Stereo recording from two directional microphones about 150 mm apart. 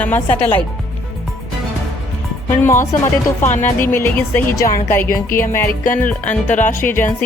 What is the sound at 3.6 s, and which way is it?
Speech, 15° left (ahead or behind).